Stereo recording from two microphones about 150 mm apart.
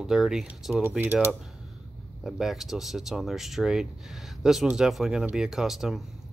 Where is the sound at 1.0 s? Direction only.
15° right (ahead or behind).